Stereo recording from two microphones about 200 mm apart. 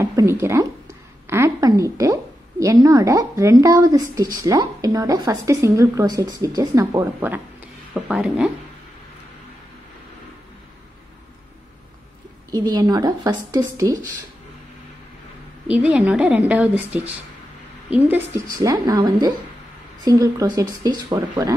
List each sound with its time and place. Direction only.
0.0 s speech: 15° right (ahead or behind)
12.4 s speech: 20° right (ahead or behind)
15.6 s speech: 5° right (ahead or behind)
17.8 s speech: 10° right (ahead or behind)